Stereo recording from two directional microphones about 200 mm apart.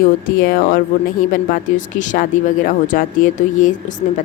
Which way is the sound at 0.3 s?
50° left (ahead or behind).